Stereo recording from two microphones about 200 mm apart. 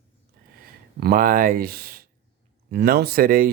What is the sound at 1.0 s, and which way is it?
Speech, 50° right (ahead or behind).